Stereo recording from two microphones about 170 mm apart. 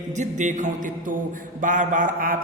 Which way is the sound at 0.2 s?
45° right (ahead or behind).